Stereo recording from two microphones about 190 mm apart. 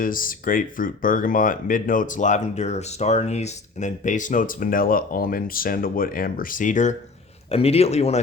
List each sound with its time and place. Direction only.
0.0 s speech: 45° left (ahead or behind)